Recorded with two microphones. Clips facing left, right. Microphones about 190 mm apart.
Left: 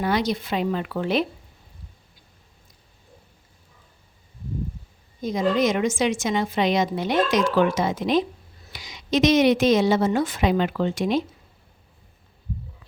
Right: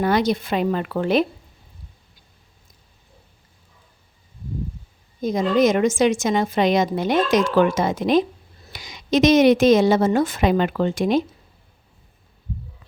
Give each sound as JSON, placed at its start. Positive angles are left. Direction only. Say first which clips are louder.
{"t": 0.0, "sound": "a woman's voice", "louder": "right 4 dB", "side_deg": -50}
{"t": 5.2, "sound": "a woman's voice", "louder": "right 4 dB", "side_deg": -50}